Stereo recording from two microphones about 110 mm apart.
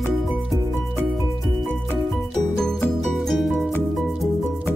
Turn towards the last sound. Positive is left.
turn(degrees=0)  # may be behind; listen again after turning